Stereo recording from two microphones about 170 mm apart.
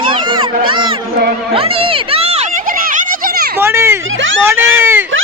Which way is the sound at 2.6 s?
55° right (ahead or behind).